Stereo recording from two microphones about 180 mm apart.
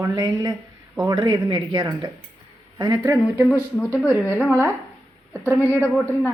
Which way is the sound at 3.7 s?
10° left (ahead or behind).